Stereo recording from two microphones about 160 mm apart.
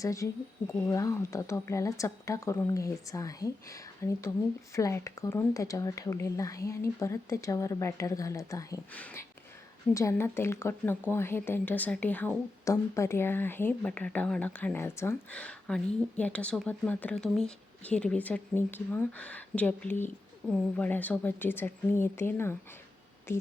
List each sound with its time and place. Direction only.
0.0 s speech: 20° left (ahead or behind)
9.9 s speech: 20° left (ahead or behind)